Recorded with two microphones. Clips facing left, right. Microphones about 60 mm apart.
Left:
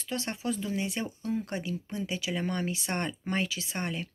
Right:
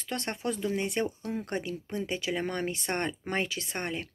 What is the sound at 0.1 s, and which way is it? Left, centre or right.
Speech, right.